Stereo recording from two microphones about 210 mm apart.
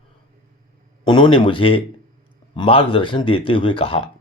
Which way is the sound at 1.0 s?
20° left (ahead or behind).